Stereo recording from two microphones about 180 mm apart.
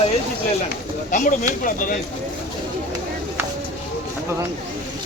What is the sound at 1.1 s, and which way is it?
Speech, 45° left (ahead or behind).